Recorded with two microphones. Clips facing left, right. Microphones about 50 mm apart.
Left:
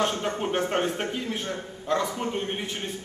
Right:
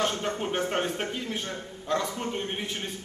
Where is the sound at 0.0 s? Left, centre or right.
Centre.